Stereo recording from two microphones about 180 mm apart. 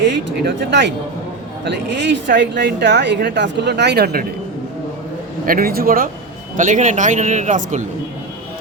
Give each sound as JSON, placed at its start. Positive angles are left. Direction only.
{"t": 0.0, "sound": "speech", "side_deg": -70}
{"t": 5.5, "sound": "a man's voice", "side_deg": -55}